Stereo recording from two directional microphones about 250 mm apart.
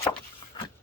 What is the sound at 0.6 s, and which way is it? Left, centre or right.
Vehicle, centre.